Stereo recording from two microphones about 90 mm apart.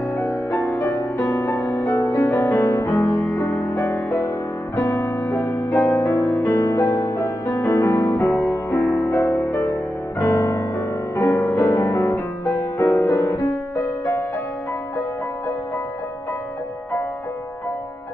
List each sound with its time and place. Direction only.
0.7 s music: 35° left (ahead or behind)
3.8 s music: 30° left (ahead or behind)